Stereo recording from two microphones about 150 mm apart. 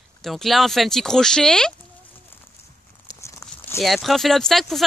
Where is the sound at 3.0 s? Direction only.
20° left (ahead or behind).